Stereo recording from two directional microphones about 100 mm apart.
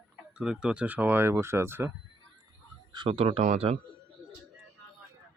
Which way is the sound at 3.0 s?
75° right (ahead or behind).